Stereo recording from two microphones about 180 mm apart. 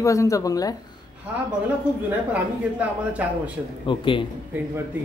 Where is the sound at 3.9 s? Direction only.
25° left (ahead or behind).